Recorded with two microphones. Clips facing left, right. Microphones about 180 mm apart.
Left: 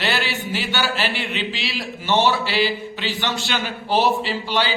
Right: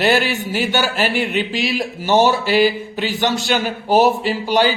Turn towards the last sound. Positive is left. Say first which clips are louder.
# right 6 dB
turn(degrees=-45)  # may be behind; listen again after turning